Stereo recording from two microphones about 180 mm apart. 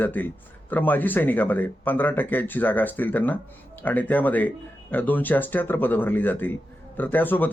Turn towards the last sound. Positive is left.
turn(degrees=10)  # may be behind; listen again after turning